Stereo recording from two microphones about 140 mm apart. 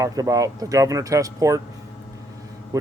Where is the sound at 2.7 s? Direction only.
20° right (ahead or behind).